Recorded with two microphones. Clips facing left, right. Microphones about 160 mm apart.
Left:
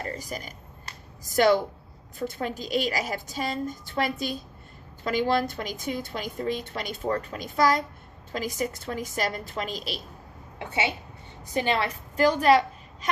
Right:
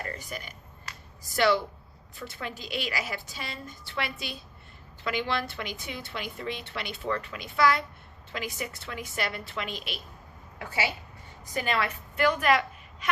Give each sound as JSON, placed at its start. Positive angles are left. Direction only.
{"t": 0.0, "sound": "a woman's voice", "side_deg": 35}
{"t": 10.6, "sound": "a woman's voice", "side_deg": 25}